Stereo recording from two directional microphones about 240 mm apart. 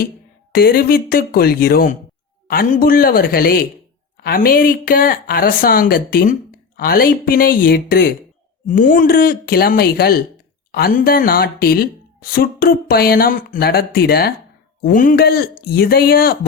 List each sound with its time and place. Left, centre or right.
0.5 s a woman's voice: left